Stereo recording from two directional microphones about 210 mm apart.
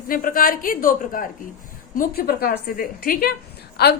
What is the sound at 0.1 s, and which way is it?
A woman's voice, 40° left (ahead or behind).